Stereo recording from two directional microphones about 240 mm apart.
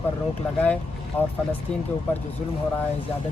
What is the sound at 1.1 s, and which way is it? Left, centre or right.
Speech, centre.